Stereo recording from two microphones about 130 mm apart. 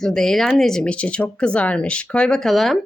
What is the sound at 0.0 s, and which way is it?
Speech, 5° left (ahead or behind).